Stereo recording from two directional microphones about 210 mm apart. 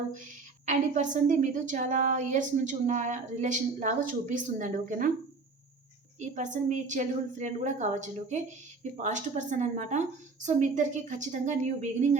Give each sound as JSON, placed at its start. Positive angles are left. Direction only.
{"t": 0.6, "sound": "a woman's voice", "side_deg": -35}
{"t": 6.1, "sound": "a woman's voice", "side_deg": -35}